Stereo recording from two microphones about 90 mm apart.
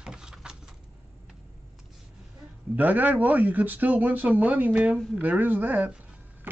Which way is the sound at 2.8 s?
20° right (ahead or behind).